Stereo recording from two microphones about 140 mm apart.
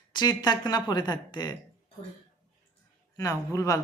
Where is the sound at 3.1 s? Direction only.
25° left (ahead or behind).